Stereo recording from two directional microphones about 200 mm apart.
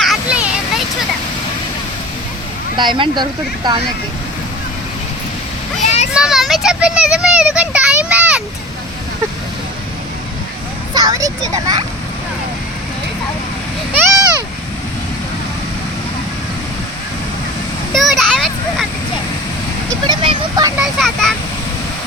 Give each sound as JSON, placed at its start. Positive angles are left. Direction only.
{"t": 0.0, "sound": "a sound", "side_deg": -5}
{"t": 2.7, "sound": "speech", "side_deg": -25}
{"t": 5.8, "sound": "children playing", "side_deg": 35}
{"t": 6.1, "sound": "a child's voice", "side_deg": 0}
{"t": 10.9, "sound": "speech", "side_deg": -20}
{"t": 17.9, "sound": "a child's voice", "side_deg": 0}
{"t": 20.1, "sound": "speech", "side_deg": -20}
{"t": 20.7, "sound": "speech", "side_deg": 0}